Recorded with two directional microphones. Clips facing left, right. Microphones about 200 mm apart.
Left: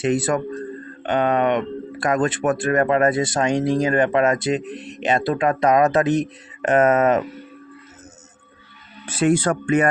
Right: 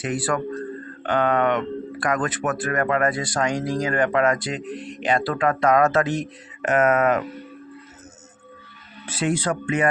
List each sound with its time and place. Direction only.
0.0 s speech: 25° left (ahead or behind)
9.0 s speech: 50° left (ahead or behind)